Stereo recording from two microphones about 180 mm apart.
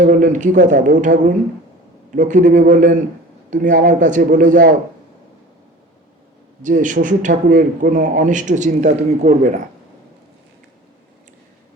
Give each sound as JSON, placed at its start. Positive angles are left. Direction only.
{"t": 0.0, "sound": "a man's voice", "side_deg": -45}
{"t": 6.6, "sound": "a man's voice", "side_deg": -45}